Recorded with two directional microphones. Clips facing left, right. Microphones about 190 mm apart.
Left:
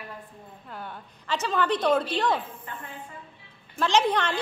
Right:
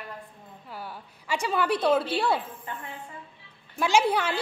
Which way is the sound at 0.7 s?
5° right (ahead or behind).